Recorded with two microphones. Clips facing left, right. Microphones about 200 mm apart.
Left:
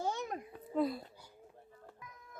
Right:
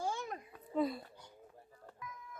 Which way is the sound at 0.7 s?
Centre (ahead or behind).